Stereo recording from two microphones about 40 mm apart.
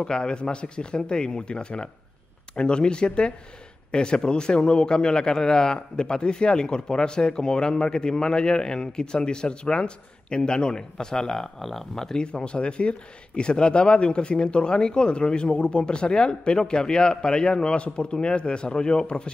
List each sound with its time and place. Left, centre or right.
0.0 s a man's voice: left
12.2 s a man's voice: left